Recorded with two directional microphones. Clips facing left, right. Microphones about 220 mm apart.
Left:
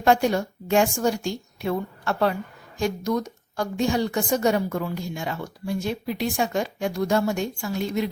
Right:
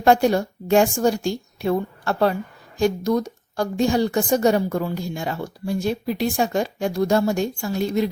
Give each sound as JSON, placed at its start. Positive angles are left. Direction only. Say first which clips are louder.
{"t": 0.0, "sound": "a woman's voice", "louder": "right 3 dB", "side_deg": -35}